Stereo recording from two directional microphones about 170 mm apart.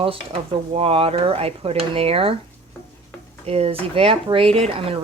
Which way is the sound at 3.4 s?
35° right (ahead or behind).